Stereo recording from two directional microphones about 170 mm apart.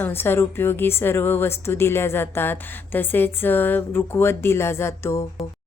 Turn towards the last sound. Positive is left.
turn(degrees=15)  # may be behind; listen again after turning